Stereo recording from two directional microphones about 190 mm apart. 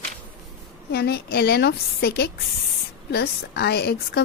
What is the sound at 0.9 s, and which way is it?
A woman's voice, 60° left (ahead or behind).